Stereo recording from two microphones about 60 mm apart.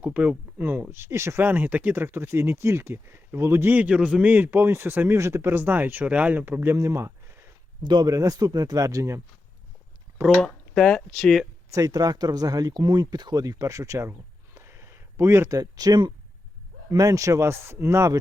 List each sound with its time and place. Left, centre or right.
0.0 s speech: right
0.6 s speech: right
1.4 s speech: right
3.7 s speech: right
5.0 s speech: right
6.7 s speech: right
8.0 s speech: right
10.4 s speech: centre
11.7 s speech: right
14.1 s a sound: right
15.4 s speech: right
16.9 s speech: right